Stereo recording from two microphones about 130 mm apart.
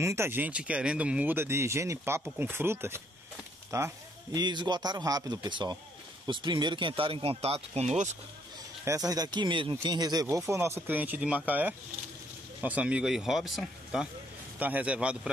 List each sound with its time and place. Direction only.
0.0 s speech: 20° right (ahead or behind); by 8.2 s 60° right (ahead or behind)
8.8 s speech: 25° right (ahead or behind); by 14.0 s centre (ahead or behind)
14.6 s speech: 10° right (ahead or behind)